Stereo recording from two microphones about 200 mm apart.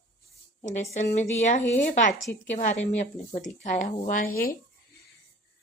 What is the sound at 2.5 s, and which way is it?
A woman's voice, 35° left (ahead or behind).